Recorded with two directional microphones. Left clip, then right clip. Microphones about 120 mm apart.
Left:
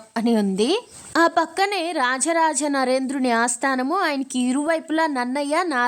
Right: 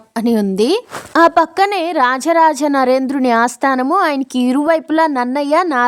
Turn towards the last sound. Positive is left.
turn(degrees=-15)  # may be behind; listen again after turning